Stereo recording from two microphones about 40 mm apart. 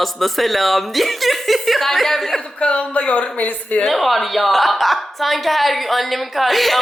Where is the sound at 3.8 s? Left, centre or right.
Centre.